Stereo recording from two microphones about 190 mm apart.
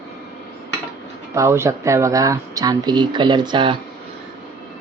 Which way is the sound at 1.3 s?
15° right (ahead or behind).